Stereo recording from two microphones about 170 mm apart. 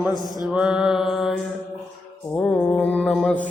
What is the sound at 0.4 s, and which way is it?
Mantra, 5° right (ahead or behind).